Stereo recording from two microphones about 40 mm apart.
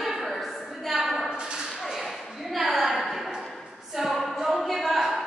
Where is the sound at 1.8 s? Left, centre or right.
Centre.